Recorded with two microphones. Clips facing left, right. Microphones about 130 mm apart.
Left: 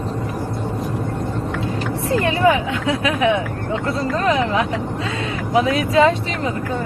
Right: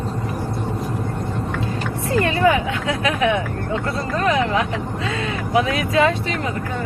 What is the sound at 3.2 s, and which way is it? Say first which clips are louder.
Speech: left 2 dB; 15° left (ahead or behind).